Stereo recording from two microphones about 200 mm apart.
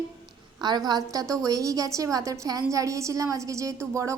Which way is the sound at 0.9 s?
20° right (ahead or behind).